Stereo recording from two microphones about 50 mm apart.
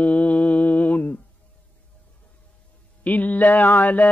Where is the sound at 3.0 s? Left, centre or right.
Left.